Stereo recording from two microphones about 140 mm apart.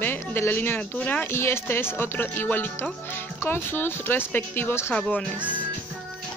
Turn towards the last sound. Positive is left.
turn(degrees=5)  # may be behind; listen again after turning